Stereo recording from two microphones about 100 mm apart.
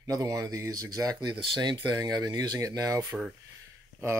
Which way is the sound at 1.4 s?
50° right (ahead or behind).